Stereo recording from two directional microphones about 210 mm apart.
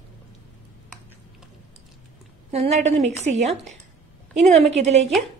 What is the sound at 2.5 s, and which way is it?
Speech, 30° right (ahead or behind).